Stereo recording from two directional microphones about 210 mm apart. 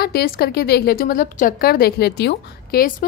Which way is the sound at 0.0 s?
50° left (ahead or behind).